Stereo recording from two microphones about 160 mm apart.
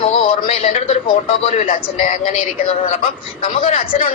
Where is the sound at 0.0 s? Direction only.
40° left (ahead or behind).